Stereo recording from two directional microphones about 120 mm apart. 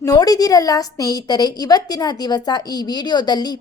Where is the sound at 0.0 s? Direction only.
30° left (ahead or behind).